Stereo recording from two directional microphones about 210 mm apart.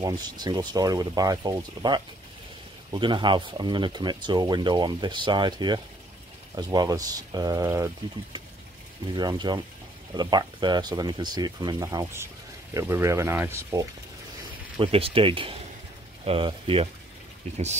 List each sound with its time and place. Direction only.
0.0 s speech: 20° right (ahead or behind)
14.8 s speech: 25° right (ahead or behind)